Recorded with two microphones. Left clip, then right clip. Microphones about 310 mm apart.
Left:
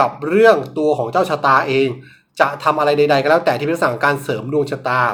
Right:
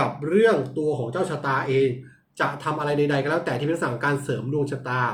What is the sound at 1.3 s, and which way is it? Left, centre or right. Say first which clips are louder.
Speech: left 11 dB; centre.